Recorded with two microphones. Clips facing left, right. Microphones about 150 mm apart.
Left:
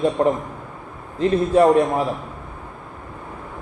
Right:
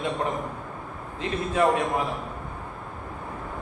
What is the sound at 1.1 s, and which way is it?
Speech, 40° left (ahead or behind).